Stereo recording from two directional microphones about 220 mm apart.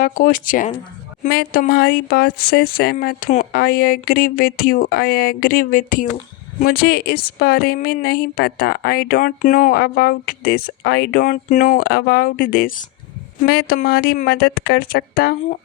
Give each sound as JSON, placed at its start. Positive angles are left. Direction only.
{"t": 0.0, "sound": "speech", "side_deg": 40}